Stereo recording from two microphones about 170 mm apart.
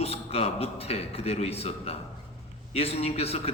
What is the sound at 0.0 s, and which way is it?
A man's voice, 35° left (ahead or behind).